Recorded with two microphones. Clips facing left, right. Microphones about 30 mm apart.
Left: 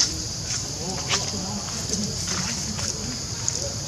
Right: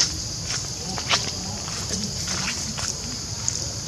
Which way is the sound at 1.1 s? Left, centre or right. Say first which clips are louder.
Right 4 dB; right.